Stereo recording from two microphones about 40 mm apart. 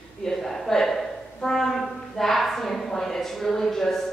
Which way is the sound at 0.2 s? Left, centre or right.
Centre.